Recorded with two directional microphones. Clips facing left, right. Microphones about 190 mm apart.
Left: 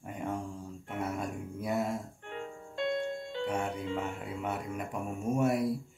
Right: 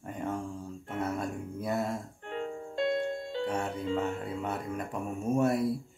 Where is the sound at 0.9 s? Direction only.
10° left (ahead or behind).